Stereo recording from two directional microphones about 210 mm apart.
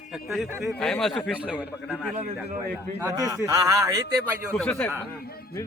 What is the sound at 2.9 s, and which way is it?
A man's voice, 15° right (ahead or behind).